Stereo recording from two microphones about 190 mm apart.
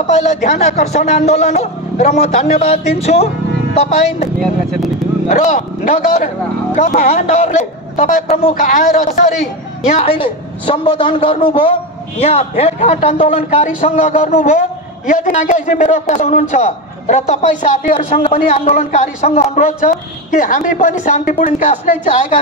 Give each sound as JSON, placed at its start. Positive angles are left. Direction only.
{"t": 0.0, "sound": "speech", "side_deg": 40}
{"t": 5.3, "sound": "a man's voice", "side_deg": 40}